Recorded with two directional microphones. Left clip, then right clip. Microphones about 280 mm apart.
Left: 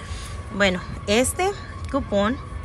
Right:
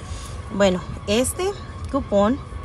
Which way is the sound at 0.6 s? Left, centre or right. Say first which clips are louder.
Right 2 dB; centre.